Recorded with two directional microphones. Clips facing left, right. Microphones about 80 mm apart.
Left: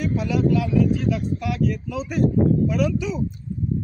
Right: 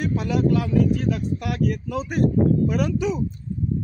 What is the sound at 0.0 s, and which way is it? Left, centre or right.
Speech, right.